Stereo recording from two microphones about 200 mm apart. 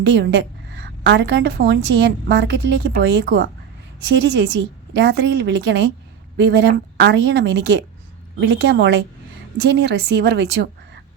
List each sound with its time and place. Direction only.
0.0 s a woman's voice: 60° right (ahead or behind)